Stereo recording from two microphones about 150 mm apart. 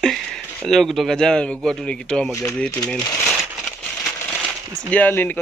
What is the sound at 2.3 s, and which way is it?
Speech, 20° left (ahead or behind).